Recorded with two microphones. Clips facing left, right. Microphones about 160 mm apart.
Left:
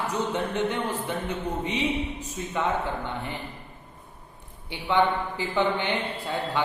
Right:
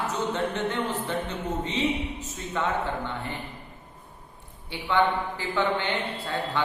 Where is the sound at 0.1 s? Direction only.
15° left (ahead or behind).